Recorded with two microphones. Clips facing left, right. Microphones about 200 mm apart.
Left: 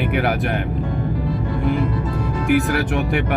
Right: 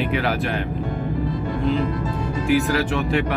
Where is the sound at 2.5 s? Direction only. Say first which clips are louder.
Left 1 dB; 60° left (ahead or behind).